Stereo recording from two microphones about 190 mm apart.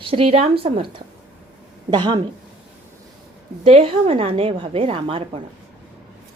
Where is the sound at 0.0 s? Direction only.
30° right (ahead or behind).